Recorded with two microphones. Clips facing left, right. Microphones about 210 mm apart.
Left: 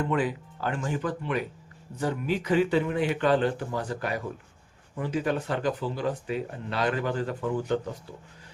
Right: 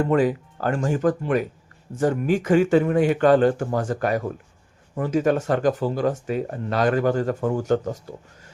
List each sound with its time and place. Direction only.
0.0 s speech: 45° right (ahead or behind)